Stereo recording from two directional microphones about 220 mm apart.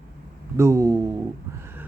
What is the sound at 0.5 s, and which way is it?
Speech, 15° right (ahead or behind).